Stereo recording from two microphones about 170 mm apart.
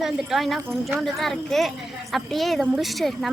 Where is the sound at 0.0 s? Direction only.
Centre (ahead or behind).